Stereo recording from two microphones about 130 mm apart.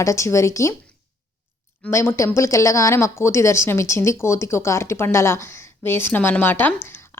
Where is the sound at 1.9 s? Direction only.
20° left (ahead or behind).